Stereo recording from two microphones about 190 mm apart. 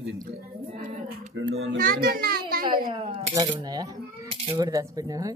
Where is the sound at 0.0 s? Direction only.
60° right (ahead or behind).